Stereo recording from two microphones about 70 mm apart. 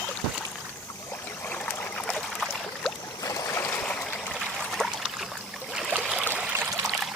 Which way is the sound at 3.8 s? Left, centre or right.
Centre.